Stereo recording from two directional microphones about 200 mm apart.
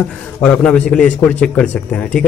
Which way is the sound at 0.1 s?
5° left (ahead or behind).